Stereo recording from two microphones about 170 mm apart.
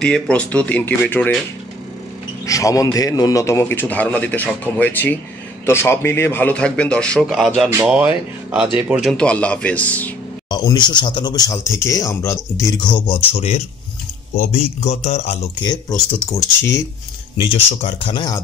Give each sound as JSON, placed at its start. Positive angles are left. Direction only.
{"t": 0.0, "sound": "a man's voice", "side_deg": 5}
{"t": 2.4, "sound": "a man's voice", "side_deg": 20}
{"t": 9.1, "sound": "a man's voice", "side_deg": 5}
{"t": 10.5, "sound": "speech", "side_deg": 25}
{"t": 12.9, "sound": "a man's voice", "side_deg": 30}
{"t": 16.3, "sound": "a man's voice", "side_deg": 15}
{"t": 17.4, "sound": "a man's voice", "side_deg": 35}